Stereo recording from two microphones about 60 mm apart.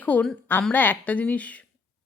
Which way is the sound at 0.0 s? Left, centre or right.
Left.